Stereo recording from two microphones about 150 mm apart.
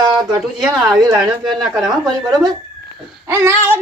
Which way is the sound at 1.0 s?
25° right (ahead or behind).